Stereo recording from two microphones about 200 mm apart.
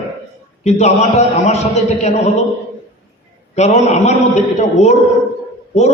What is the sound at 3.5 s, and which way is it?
A man's voice, 35° left (ahead or behind).